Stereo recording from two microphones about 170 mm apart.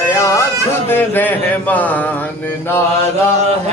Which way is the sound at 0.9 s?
10° left (ahead or behind).